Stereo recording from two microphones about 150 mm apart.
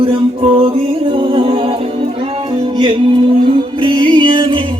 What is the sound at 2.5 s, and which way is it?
Music, 30° right (ahead or behind).